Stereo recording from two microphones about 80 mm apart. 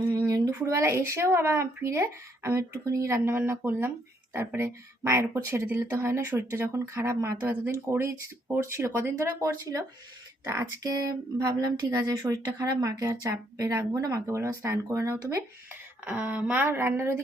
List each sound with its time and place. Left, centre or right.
0.3 s a sound: right
0.6 s speech: right
3.3 s speech: right
10.4 s speech: right
10.9 s a sound: right
13.6 s speech: right
15.7 s speech: right
16.6 s speech: right